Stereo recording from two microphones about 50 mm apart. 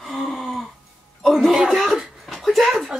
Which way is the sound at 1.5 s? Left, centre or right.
Centre.